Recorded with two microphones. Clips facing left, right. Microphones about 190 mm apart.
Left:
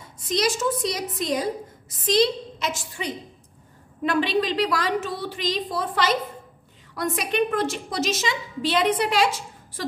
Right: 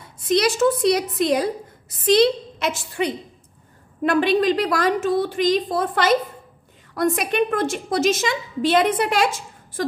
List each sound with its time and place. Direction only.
0.3 s a woman's voice: 65° right (ahead or behind)
4.0 s a woman's voice: 50° right (ahead or behind)